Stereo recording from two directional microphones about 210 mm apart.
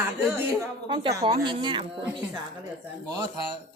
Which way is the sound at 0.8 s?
20° right (ahead or behind).